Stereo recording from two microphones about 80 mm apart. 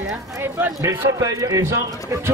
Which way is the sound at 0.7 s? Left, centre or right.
Right.